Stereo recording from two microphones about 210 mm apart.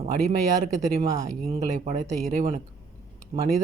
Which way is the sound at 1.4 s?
35° right (ahead or behind).